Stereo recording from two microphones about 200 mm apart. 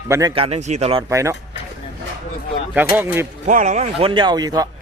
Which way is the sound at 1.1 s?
15° right (ahead or behind).